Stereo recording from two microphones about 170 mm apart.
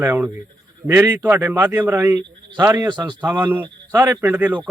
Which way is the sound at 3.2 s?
10° right (ahead or behind).